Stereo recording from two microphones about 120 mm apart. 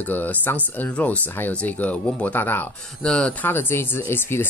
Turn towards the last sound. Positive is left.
turn(degrees=20)  # may be behind; listen again after turning